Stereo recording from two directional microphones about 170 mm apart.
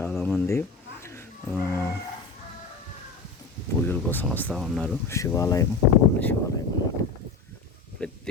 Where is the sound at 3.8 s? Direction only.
10° left (ahead or behind).